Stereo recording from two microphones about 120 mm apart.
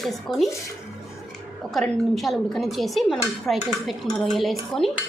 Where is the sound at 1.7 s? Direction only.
Centre (ahead or behind).